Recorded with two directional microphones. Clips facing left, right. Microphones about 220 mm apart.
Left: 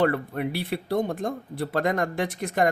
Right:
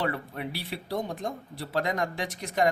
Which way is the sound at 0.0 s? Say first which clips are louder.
Left 8 dB; 55° left (ahead or behind).